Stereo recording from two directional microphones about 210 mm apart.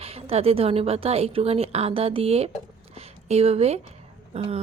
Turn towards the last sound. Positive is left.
turn(degrees=-30)  # may be behind; listen again after turning